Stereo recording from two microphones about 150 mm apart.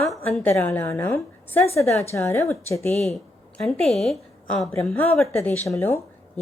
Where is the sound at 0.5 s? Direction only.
15° left (ahead or behind).